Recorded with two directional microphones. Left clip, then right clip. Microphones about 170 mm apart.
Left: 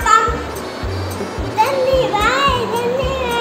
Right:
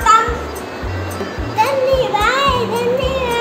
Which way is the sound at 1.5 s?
Centre (ahead or behind).